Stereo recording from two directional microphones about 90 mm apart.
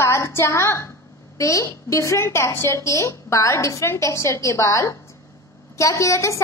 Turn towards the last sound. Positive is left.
turn(degrees=35)  # may be behind; listen again after turning